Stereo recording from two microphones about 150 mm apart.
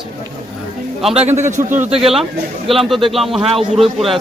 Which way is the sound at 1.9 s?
40° right (ahead or behind).